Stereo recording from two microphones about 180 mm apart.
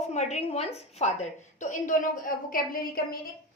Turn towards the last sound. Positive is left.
turn(degrees=55)  # may be behind; listen again after turning